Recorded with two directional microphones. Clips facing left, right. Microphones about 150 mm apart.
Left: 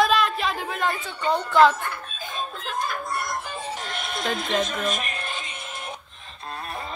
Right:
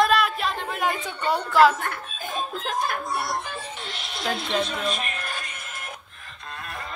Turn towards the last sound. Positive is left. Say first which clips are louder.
# left 1 dB
turn(degrees=45)  # may be behind; listen again after turning